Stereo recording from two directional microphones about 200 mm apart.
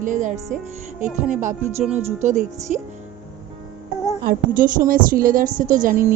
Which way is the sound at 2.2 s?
35° right (ahead or behind).